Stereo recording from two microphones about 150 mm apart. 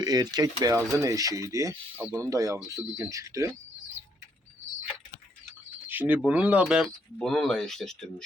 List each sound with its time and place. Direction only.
0.0 s speech: 25° right (ahead or behind)
5.9 s speech: 10° right (ahead or behind)
7.2 s speech: 5° left (ahead or behind)